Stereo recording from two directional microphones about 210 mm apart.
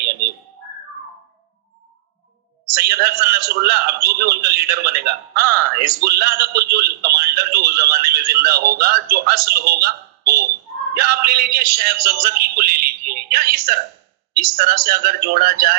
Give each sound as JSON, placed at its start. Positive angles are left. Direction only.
{"t": 2.8, "sound": "a man's voice", "side_deg": -50}